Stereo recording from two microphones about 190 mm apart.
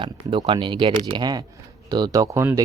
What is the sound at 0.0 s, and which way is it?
Speech, 25° right (ahead or behind).